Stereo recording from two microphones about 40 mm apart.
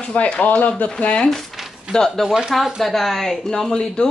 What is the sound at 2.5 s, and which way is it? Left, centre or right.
Speech, centre.